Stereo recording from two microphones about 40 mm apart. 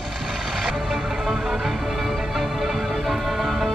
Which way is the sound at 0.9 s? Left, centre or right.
Centre.